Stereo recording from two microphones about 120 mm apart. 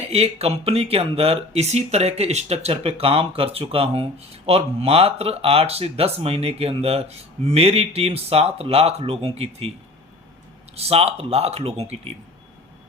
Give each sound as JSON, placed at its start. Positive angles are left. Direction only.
{"t": 0.1, "sound": "speech", "side_deg": -60}
{"t": 10.8, "sound": "speech", "side_deg": -60}